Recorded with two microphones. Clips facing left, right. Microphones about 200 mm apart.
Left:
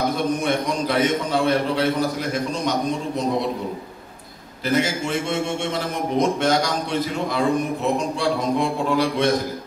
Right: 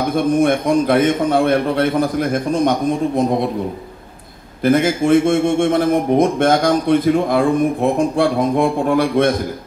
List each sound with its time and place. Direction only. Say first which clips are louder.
0.1 s a man's voice: right 7 dB; 55° right (ahead or behind)
4.6 s a man's voice: right 8 dB; 55° right (ahead or behind)